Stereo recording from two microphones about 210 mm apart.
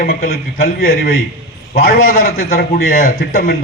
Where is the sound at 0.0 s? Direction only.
45° left (ahead or behind).